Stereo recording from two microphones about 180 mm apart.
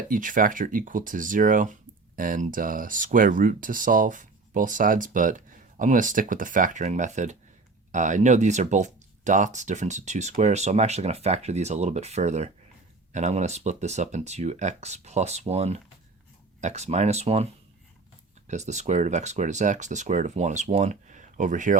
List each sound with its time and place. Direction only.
0.1 s speech: 50° right (ahead or behind)